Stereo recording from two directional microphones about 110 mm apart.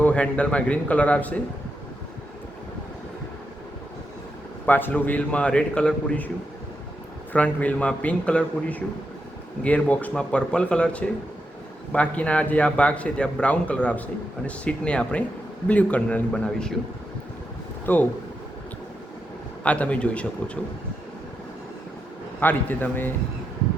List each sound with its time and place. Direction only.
0.0 s a man's voice: 10° left (ahead or behind)
4.6 s a man's voice: 15° left (ahead or behind)
7.3 s a man's voice: 15° left (ahead or behind)
17.8 s a man's voice: 15° left (ahead or behind)
19.6 s a man's voice: 10° left (ahead or behind)
22.4 s a man's voice: 15° left (ahead or behind)